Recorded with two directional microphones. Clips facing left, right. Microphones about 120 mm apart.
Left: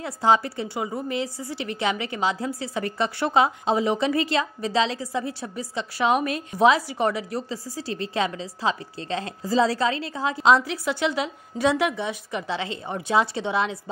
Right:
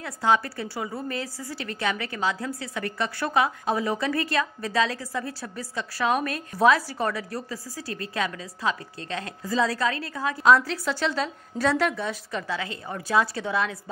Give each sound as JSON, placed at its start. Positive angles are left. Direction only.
{"t": 0.0, "sound": "a woman's voice", "side_deg": 25}